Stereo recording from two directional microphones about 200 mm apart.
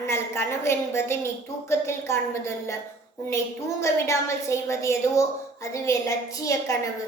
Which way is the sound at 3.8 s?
15° left (ahead or behind).